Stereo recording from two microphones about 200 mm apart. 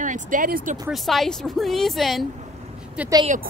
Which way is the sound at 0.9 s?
Centre (ahead or behind).